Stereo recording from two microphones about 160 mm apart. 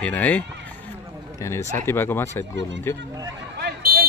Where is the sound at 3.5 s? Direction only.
80° right.